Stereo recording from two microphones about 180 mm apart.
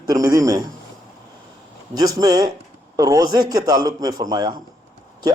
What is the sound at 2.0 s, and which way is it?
A man's voice, 20° right (ahead or behind).